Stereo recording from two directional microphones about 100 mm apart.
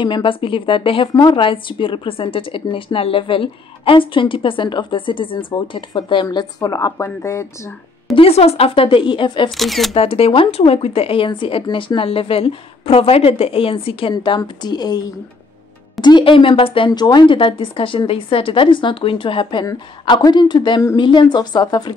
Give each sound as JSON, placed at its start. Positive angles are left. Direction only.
{"t": 0.0, "sound": "a woman's voice", "side_deg": 55}
{"t": 6.3, "sound": "a woman's voice", "side_deg": 35}
{"t": 8.2, "sound": "a woman's voice", "side_deg": 90}
{"t": 9.6, "sound": "speech", "side_deg": 0}
{"t": 9.9, "sound": "speech", "side_deg": 75}
{"t": 14.1, "sound": "a woman's voice", "side_deg": 55}
{"t": 16.9, "sound": "a woman's voice", "side_deg": 45}
{"t": 20.1, "sound": "speech", "side_deg": 45}